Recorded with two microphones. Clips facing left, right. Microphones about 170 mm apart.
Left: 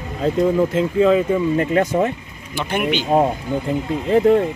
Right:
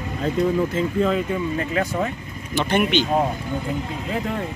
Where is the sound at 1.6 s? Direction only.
30° left (ahead or behind).